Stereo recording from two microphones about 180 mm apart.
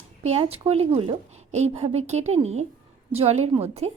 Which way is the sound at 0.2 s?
35° right (ahead or behind).